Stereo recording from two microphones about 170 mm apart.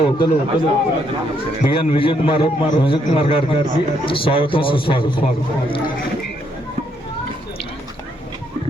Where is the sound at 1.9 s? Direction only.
30° left (ahead or behind).